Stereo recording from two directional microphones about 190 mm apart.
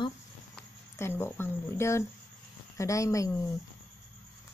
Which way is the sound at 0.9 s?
15° left (ahead or behind).